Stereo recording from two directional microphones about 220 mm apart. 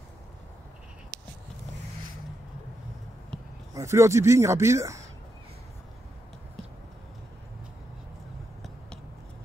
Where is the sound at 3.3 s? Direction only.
5° left (ahead or behind).